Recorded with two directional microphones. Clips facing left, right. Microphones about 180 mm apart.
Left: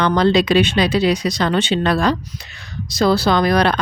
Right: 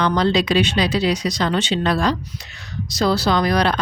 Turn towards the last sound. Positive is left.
turn(degrees=60)  # may be behind; listen again after turning